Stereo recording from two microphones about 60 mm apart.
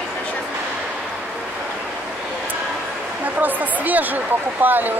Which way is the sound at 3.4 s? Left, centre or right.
Right.